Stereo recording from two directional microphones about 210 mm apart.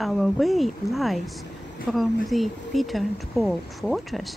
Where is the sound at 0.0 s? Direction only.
Centre (ahead or behind).